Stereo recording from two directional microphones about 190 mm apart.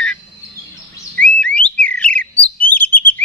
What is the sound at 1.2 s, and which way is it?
Bird, 5° left (ahead or behind).